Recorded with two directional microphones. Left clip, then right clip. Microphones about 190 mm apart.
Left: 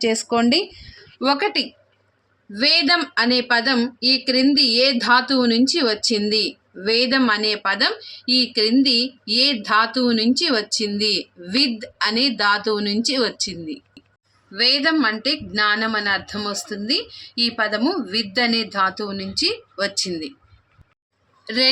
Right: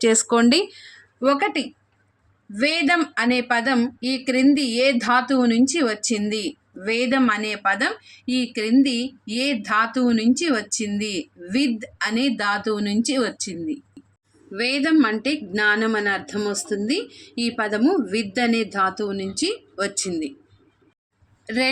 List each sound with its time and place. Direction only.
0.0 s speech: 20° right (ahead or behind)
1.2 s speech: 5° right (ahead or behind)
21.4 s speech: 10° right (ahead or behind)